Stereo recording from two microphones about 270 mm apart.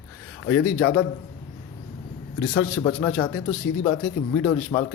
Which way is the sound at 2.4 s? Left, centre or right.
Left.